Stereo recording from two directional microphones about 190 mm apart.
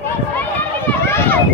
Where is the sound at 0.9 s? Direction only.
10° left (ahead or behind).